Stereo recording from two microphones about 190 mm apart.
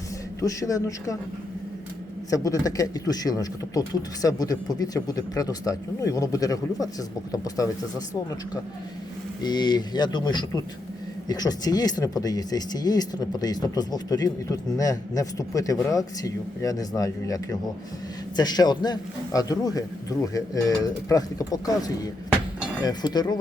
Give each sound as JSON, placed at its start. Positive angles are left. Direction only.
{"t": 0.4, "sound": "a man's voice", "side_deg": 15}
{"t": 2.3, "sound": "speech", "side_deg": 20}
{"t": 9.4, "sound": "speech", "side_deg": 20}